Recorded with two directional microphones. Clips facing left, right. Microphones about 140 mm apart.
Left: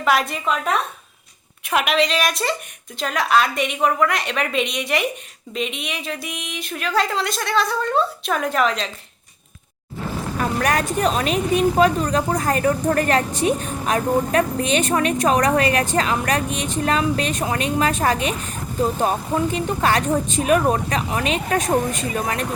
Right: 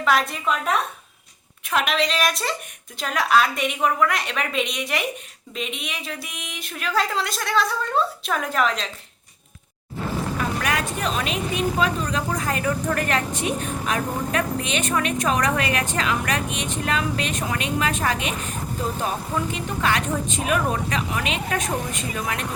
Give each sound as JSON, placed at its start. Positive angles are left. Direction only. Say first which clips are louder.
{"t": 0.0, "sound": "a woman's voice", "louder": "left 2 dB", "side_deg": 5}
{"t": 10.3, "sound": "a woman's voice", "louder": "left 7 dB", "side_deg": 40}